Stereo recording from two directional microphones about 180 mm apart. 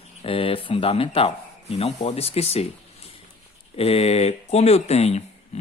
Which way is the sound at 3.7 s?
35° left (ahead or behind).